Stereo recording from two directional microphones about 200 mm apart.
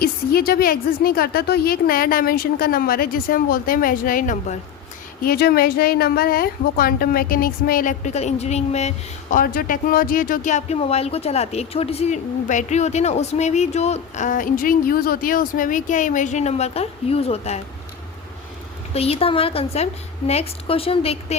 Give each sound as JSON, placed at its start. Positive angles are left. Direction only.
{"t": 0.0, "sound": "a woman's voice", "side_deg": 50}
{"t": 9.3, "sound": "speech", "side_deg": 45}
{"t": 18.9, "sound": "a woman's voice", "side_deg": 30}